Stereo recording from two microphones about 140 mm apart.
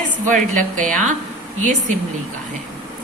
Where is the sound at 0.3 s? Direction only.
65° right (ahead or behind).